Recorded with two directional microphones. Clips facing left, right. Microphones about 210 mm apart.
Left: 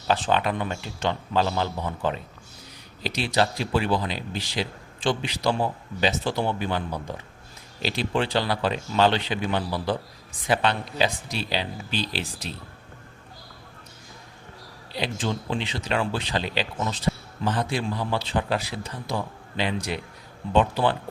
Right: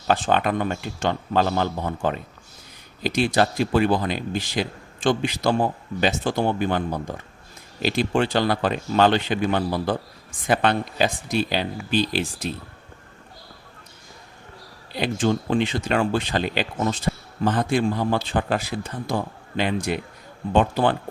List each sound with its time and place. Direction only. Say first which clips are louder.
0.1 s speech: right 3 dB; 50° right (ahead or behind)
14.9 s speech: right 6 dB; 50° right (ahead or behind)